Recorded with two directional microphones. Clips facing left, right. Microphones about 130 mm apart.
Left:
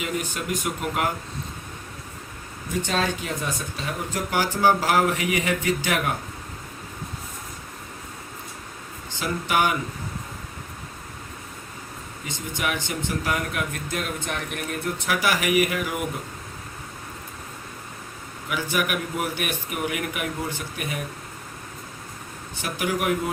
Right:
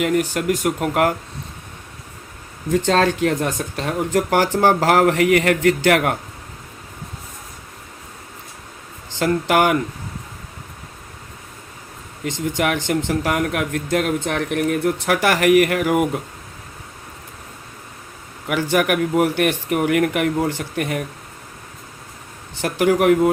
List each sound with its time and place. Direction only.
0.0 s speech: 65° right (ahead or behind)
2.7 s speech: 90° right
9.1 s speech: 90° right
12.2 s speech: 85° right; by 16.0 s 70° right (ahead or behind)
18.4 s speech: 75° right (ahead or behind)
22.6 s speech: 90° right